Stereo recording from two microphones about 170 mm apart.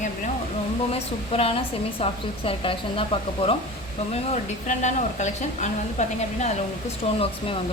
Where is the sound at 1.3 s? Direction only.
35° left (ahead or behind).